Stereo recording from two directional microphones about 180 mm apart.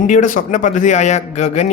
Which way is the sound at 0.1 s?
45° left (ahead or behind).